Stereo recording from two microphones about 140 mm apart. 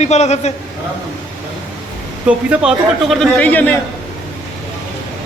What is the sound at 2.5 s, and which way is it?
A man's voice, 5° right (ahead or behind).